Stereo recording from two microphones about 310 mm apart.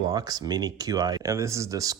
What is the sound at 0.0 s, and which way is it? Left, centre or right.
Speech, centre.